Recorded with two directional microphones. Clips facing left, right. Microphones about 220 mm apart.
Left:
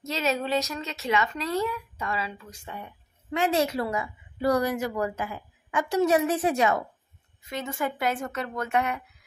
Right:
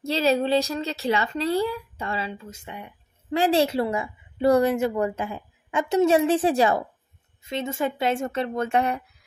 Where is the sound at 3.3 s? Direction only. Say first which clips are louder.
Right 4 dB; 30° right (ahead or behind).